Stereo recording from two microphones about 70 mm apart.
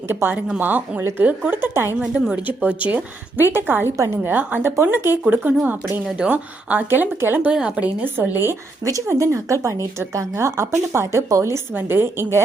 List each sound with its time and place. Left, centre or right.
0.1 s a woman's voice: right
1.7 s speech: right
2.3 s a woman's voice: right
7.5 s a woman's voice: centre
8.2 s speech: right
8.8 s speech: right
11.7 s speech: right